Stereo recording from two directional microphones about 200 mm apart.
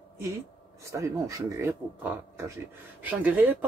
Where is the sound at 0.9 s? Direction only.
15° right (ahead or behind).